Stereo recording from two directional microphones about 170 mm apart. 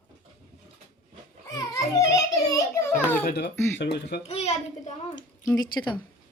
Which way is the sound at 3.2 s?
75° left (ahead or behind).